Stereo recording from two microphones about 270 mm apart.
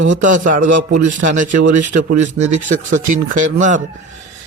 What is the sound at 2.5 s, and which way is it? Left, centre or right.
Speech, right.